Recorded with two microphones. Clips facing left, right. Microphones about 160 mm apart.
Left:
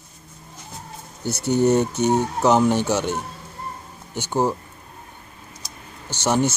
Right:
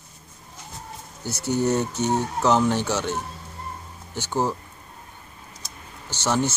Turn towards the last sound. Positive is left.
turn(degrees=15)  # may be behind; listen again after turning